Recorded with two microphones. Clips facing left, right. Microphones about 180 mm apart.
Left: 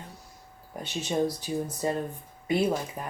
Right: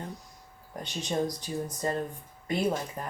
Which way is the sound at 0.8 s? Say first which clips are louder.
Left 3 dB; 5° left (ahead or behind).